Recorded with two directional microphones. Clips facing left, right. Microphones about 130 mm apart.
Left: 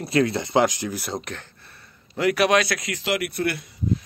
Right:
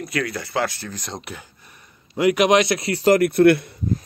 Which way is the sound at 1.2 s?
10° right (ahead or behind).